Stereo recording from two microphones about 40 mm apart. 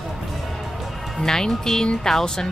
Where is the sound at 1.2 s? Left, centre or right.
Centre.